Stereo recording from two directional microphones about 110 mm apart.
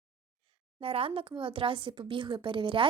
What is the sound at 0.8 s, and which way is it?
A woman's voice, 60° right (ahead or behind).